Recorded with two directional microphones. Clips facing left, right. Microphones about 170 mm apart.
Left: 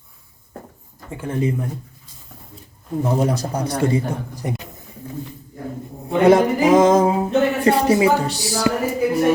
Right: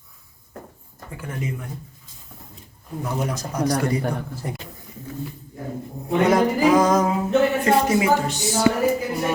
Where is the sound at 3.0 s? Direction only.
30° left (ahead or behind).